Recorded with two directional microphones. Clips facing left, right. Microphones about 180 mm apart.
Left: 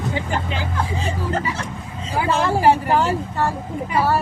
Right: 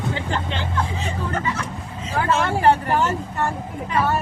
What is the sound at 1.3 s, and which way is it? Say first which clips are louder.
Speech: left 1 dB; 30° left (ahead or behind).